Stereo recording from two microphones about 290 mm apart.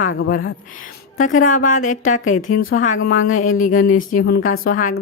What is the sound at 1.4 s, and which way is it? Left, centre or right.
Speech, left.